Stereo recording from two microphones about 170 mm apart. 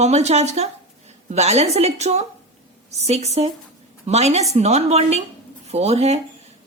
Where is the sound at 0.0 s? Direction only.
40° right (ahead or behind).